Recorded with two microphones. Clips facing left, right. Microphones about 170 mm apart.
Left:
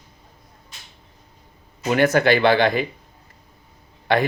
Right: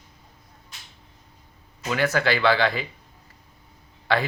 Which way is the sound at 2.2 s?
20° left (ahead or behind).